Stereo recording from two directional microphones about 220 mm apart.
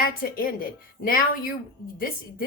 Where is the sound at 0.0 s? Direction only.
40° left (ahead or behind).